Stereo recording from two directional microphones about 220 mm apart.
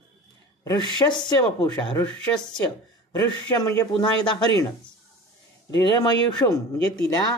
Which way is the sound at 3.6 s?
20° left (ahead or behind).